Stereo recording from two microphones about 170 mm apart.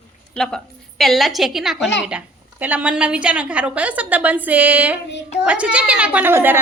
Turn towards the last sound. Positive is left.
turn(degrees=-10)  # may be behind; listen again after turning